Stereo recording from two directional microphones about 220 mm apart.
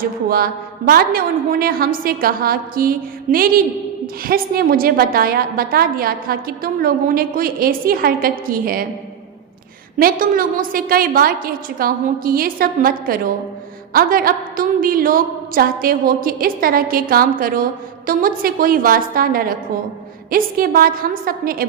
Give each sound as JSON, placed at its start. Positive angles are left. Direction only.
{"t": 0.0, "sound": "a woman's voice", "side_deg": -45}
{"t": 10.0, "sound": "a woman's voice", "side_deg": -40}